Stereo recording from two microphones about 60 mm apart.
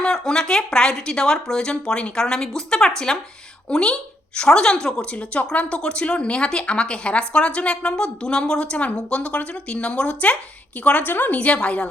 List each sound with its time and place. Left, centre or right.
0.0 s a woman's voice: centre
5.1 s a woman's voice: centre